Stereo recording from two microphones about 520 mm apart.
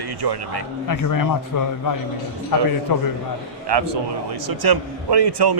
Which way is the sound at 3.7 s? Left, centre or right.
Right.